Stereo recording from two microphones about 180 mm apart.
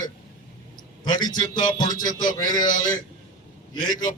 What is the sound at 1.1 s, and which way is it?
A man's voice, 25° left (ahead or behind).